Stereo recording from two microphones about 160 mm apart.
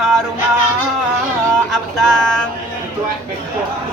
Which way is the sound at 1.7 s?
Centre (ahead or behind).